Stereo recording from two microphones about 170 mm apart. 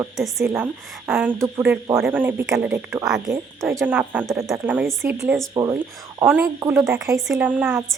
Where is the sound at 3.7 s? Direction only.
15° right (ahead or behind).